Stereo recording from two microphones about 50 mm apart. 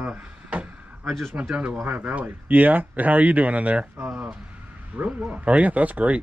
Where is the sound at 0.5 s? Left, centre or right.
Right.